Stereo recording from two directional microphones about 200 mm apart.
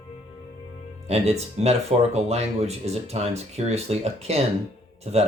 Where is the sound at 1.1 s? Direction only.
30° right (ahead or behind).